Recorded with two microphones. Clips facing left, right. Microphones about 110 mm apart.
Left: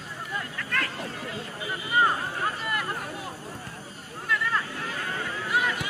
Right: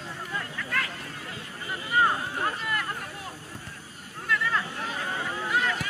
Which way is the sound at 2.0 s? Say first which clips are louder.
Even; 5° left (ahead or behind).